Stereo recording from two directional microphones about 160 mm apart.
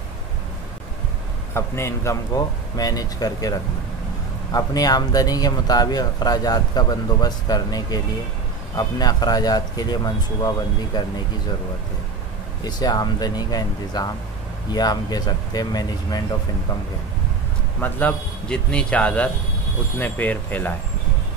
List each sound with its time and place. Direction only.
1.5 s speech: 15° left (ahead or behind)
12.6 s speech: 25° left (ahead or behind)
17.7 s a man's voice: 10° left (ahead or behind)